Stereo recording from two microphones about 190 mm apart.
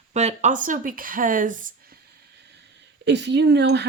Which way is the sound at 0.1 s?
35° right (ahead or behind).